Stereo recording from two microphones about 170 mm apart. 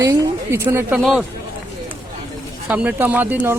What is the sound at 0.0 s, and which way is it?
Speech, 15° right (ahead or behind).